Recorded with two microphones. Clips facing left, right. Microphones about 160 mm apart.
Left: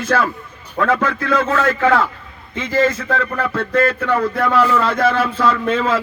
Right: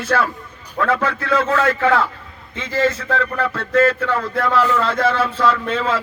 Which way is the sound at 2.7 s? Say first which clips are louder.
Left 2 dB; 15° left (ahead or behind).